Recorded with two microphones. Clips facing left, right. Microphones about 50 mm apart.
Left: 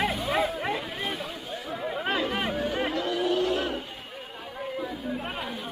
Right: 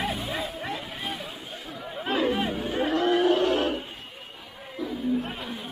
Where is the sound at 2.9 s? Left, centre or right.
Right.